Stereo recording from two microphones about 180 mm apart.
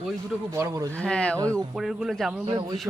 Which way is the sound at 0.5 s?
15° right (ahead or behind).